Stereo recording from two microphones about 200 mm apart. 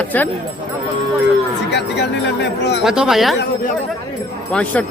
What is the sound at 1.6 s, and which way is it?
Speech, 60° left (ahead or behind).